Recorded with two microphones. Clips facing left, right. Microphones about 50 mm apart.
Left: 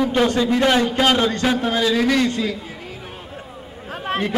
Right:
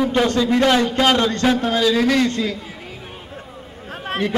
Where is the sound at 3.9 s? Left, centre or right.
Centre.